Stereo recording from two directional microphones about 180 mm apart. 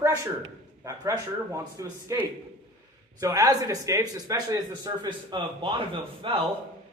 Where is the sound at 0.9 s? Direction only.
20° right (ahead or behind).